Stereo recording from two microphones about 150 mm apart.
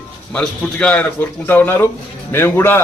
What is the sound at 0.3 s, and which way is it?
A man's voice, 10° left (ahead or behind).